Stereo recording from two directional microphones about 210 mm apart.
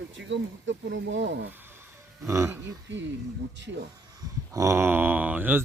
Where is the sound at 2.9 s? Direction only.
60° right (ahead or behind).